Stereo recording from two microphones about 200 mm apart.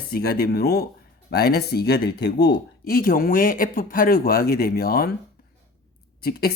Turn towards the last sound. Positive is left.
turn(degrees=50)  # may be behind; listen again after turning